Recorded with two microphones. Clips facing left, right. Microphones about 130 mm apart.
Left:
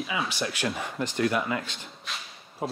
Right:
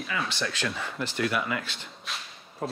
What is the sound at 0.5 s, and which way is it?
Speech, 15° left (ahead or behind).